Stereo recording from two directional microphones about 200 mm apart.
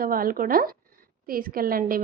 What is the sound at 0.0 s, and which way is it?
A woman's voice, 45° right (ahead or behind).